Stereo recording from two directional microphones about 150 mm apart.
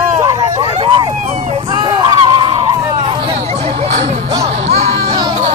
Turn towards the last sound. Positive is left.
turn(degrees=-45)  # may be behind; listen again after turning